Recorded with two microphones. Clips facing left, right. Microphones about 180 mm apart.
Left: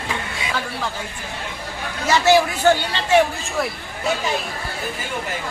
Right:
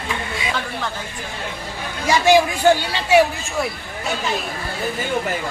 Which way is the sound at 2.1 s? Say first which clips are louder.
Right 1 dB; 15° right (ahead or behind).